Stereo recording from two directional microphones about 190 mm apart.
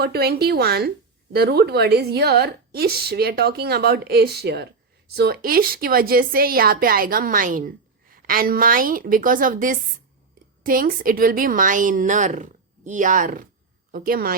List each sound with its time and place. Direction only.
0.0 s a woman's voice: 55° right (ahead or behind)